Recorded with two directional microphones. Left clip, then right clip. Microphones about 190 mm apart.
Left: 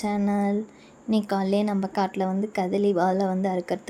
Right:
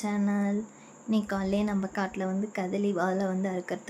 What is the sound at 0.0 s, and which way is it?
A woman's voice, 20° left (ahead or behind).